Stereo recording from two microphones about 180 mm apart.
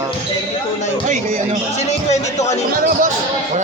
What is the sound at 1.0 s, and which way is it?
Speech, 40° right (ahead or behind).